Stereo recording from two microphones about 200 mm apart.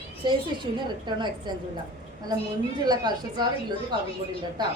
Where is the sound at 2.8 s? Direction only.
20° right (ahead or behind).